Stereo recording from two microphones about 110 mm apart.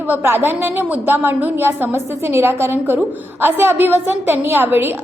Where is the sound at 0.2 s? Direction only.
20° right (ahead or behind).